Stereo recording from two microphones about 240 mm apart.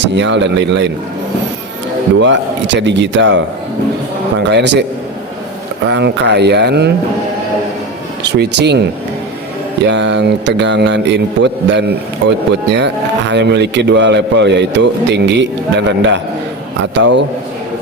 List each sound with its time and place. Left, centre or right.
0.0 s a man's voice: right
2.1 s a man's voice: right
5.9 s a man's voice: right
8.2 s a man's voice: right
9.9 s a man's voice: right